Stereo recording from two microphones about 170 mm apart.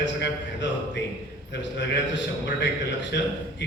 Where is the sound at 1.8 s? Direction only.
90° left.